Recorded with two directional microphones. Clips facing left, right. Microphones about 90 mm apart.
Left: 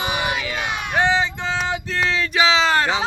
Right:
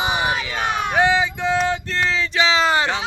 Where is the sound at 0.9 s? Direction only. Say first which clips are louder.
Even; 5° right (ahead or behind).